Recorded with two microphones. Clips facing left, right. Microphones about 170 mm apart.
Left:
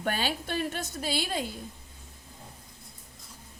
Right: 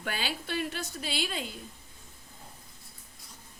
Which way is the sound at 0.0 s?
45° left (ahead or behind).